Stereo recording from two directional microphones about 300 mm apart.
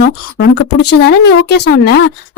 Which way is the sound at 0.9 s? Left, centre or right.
Left.